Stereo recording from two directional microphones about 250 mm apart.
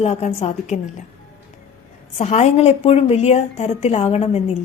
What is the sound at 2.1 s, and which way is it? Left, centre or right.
A woman's voice, left.